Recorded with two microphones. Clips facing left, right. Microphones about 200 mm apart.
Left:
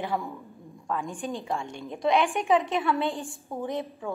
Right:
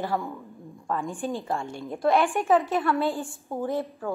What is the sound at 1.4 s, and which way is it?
A woman's voice, 5° right (ahead or behind).